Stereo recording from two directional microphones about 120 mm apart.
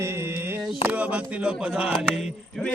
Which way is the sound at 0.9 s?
10° right (ahead or behind).